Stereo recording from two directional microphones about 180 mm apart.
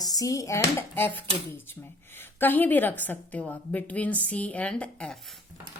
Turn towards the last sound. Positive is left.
turn(degrees=5)  # may be behind; listen again after turning